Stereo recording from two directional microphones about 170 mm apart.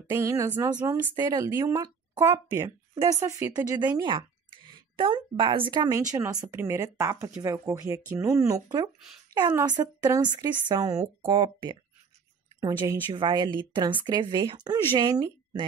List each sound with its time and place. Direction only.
0.1 s a woman's voice: 20° right (ahead or behind)